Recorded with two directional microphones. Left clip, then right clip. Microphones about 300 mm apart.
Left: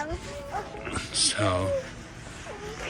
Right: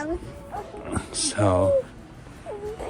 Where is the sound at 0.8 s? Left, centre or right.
Centre.